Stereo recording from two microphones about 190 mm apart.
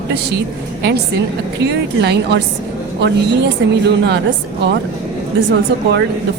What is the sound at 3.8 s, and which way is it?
Speech, 60° right (ahead or behind).